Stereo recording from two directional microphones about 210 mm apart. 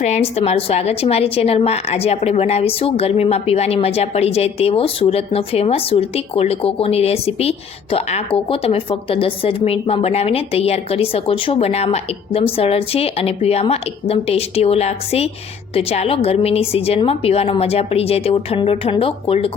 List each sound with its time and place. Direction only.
0.0 s a woman's voice: 30° left (ahead or behind)